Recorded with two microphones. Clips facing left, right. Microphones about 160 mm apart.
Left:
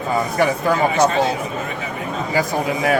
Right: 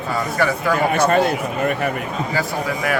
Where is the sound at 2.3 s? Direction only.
20° left (ahead or behind).